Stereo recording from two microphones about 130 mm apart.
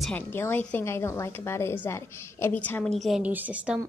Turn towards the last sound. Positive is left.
turn(degrees=-10)  # may be behind; listen again after turning